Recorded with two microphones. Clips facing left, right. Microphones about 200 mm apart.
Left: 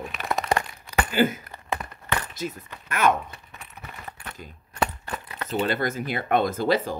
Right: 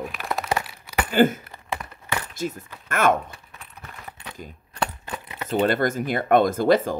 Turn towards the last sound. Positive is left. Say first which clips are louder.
# right 4 dB
turn(degrees=-50)  # may be behind; listen again after turning